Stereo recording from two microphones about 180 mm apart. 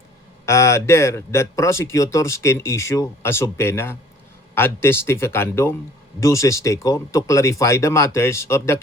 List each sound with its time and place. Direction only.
0.4 s speech: 15° left (ahead or behind)